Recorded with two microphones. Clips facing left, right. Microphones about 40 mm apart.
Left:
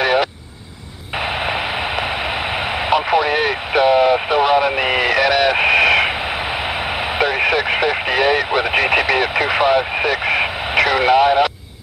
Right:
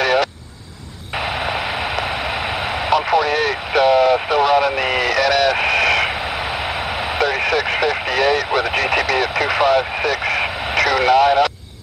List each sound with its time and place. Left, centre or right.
0.0 s vehicle: centre
1.4 s a sound: centre
2.5 s vehicle: centre
7.2 s vehicle: centre